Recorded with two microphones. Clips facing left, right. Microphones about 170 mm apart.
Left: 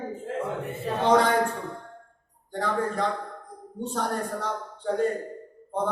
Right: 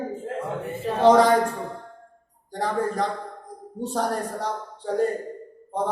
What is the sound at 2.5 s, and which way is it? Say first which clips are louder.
Speech: right 2 dB; 35° right (ahead or behind).